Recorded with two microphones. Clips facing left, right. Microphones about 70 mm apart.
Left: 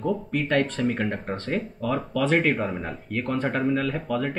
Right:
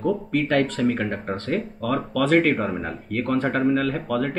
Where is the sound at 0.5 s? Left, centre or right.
Right.